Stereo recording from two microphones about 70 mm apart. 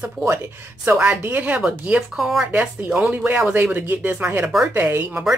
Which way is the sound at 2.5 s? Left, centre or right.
Centre.